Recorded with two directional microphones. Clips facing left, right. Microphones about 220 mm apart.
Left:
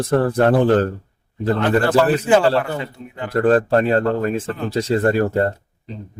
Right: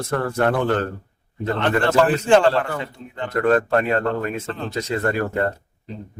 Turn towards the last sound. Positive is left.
turn(degrees=35)  # may be behind; listen again after turning